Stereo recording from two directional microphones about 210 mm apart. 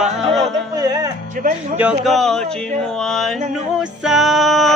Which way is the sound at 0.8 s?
15° right (ahead or behind).